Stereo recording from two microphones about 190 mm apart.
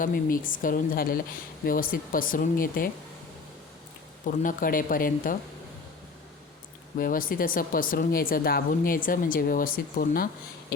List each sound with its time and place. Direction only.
0.0 s speech: 45° left (ahead or behind)
4.3 s speech: 45° left (ahead or behind)
6.9 s speech: 45° left (ahead or behind)